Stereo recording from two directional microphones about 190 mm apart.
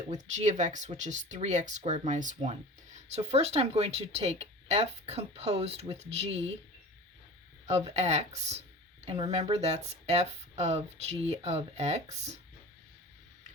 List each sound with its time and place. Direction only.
0.1 s speech: 35° right (ahead or behind)
7.7 s speech: 35° right (ahead or behind)